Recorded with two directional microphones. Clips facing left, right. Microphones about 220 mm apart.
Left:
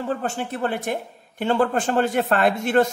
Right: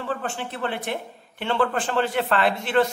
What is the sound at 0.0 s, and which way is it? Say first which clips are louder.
A man's voice: left 3 dB; 40° left (ahead or behind).